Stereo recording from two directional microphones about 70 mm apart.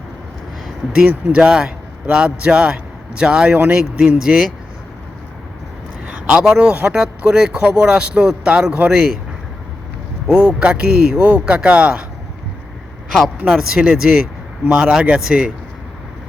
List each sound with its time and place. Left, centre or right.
1.0 s speech: right
1.5 s a man's voice: centre
6.1 s a man's voice: centre
10.3 s a man's voice: centre
13.5 s a man's voice: centre